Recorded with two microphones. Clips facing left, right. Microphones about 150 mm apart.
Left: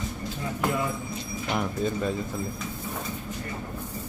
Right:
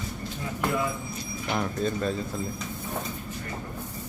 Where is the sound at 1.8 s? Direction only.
15° left (ahead or behind).